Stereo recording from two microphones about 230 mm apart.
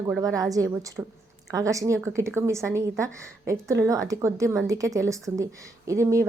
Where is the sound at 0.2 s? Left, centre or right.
Centre.